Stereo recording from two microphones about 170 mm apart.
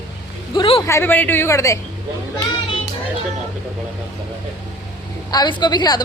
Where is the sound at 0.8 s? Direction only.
15° left (ahead or behind).